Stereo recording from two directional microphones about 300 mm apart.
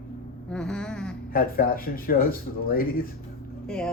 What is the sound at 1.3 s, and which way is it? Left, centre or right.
A man's voice, left.